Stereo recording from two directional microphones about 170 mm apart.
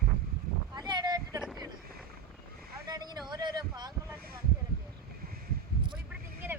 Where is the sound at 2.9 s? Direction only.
25° right (ahead or behind).